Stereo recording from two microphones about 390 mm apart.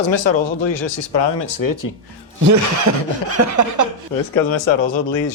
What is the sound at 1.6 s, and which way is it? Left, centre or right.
Speech, left.